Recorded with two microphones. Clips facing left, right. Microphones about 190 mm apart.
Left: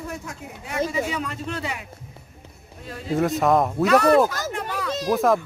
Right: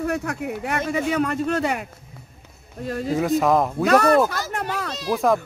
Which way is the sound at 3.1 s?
Centre (ahead or behind).